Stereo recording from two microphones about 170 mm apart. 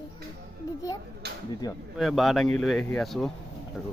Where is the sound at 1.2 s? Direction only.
75° right (ahead or behind).